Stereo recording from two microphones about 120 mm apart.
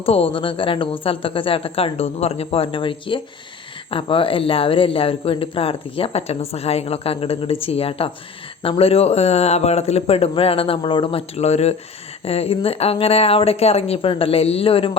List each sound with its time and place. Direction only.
0.0 s speech: 55° left (ahead or behind)
11.3 s speech: 65° left (ahead or behind)